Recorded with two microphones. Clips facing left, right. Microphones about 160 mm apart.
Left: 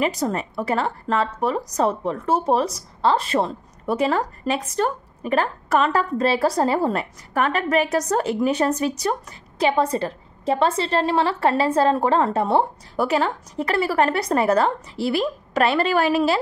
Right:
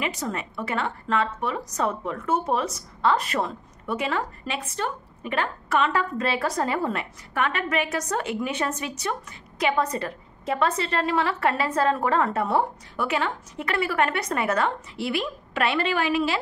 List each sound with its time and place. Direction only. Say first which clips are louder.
0.0 s a woman's voice: left 7 dB; 40° left (ahead or behind)